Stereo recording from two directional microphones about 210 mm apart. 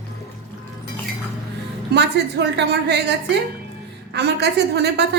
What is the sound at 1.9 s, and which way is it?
A woman's voice, 55° right (ahead or behind).